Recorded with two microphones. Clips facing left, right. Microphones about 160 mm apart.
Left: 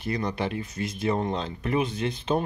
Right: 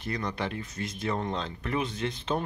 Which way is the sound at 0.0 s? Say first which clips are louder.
Left 4 dB; 10° left (ahead or behind).